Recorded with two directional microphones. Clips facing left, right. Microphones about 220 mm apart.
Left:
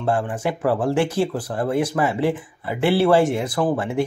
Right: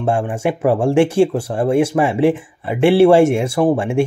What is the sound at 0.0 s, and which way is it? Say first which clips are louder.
Speech: right 4 dB; 25° right (ahead or behind).